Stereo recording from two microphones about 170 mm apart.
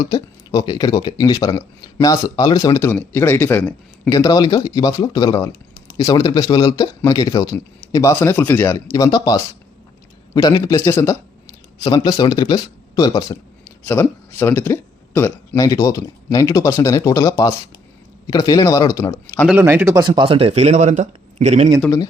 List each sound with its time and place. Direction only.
0.0 s speech: 25° left (ahead or behind); by 4.1 s 10° left (ahead or behind)
4.1 s a man's voice: 20° left (ahead or behind)
13.8 s speech: 15° left (ahead or behind)
19.5 s speech: 15° right (ahead or behind)
20.0 s speech: 30° right (ahead or behind)